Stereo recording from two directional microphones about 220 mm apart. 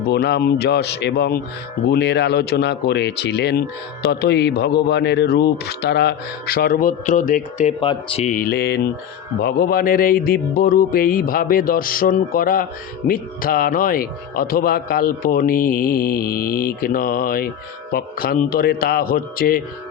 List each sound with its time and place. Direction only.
0.1 s speech: 50° left (ahead or behind)
7.8 s a man's voice: 25° left (ahead or behind); by 19.6 s 40° left (ahead or behind)